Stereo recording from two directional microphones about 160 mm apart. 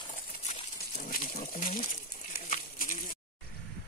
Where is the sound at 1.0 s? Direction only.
60° left (ahead or behind).